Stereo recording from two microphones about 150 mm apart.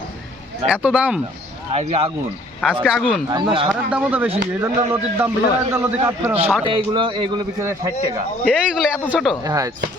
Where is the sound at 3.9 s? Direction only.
10° right (ahead or behind).